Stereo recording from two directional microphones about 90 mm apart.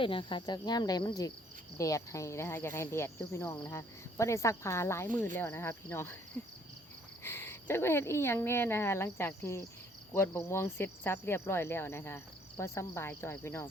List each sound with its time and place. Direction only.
0.0 s speech: 70° left (ahead or behind); by 1.3 s 45° left (ahead or behind)
1.8 s speech: 35° left (ahead or behind)
5.0 s speech: 20° left (ahead or behind)